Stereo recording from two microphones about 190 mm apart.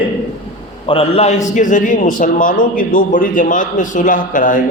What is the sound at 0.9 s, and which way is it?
A man's voice, 30° left (ahead or behind).